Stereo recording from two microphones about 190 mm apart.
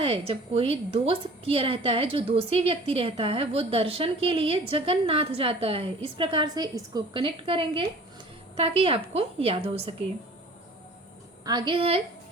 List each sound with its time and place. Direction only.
0.0 s a woman's voice: 30° right (ahead or behind)
11.4 s a woman's voice: 25° right (ahead or behind)